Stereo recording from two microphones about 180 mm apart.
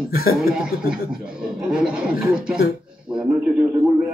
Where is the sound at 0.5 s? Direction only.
5° right (ahead or behind).